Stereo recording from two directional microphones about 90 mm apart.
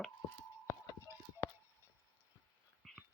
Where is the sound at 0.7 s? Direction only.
35° left (ahead or behind).